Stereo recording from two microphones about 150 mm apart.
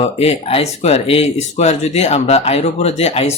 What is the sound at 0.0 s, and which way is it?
Speech, 45° left (ahead or behind).